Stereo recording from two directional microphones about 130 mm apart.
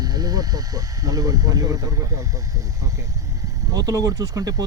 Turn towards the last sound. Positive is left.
turn(degrees=-30)  # may be behind; listen again after turning